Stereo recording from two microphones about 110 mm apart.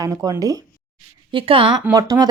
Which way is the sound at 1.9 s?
35° right (ahead or behind).